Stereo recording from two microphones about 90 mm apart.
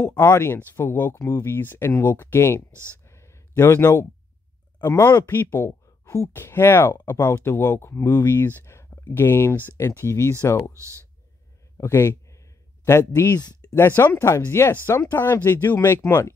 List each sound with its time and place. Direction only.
0.2 s speech: 30° left (ahead or behind)
3.1 s a sound: 30° left (ahead or behind)
4.8 s speech: 30° left (ahead or behind)
11.7 s a sound: 30° left (ahead or behind)
12.8 s speech: 30° left (ahead or behind)
13.4 s speech: 50° left (ahead or behind)
13.7 s speech: 25° left (ahead or behind)